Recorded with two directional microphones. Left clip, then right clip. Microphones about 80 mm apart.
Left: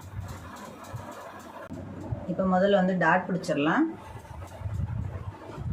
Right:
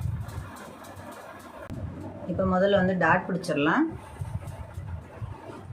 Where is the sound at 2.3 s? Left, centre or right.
Right.